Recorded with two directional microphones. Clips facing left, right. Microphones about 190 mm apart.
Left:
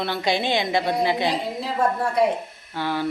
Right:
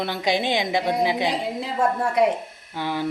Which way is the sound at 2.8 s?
15° right (ahead or behind).